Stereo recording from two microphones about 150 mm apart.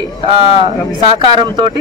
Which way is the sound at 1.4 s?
30° right (ahead or behind).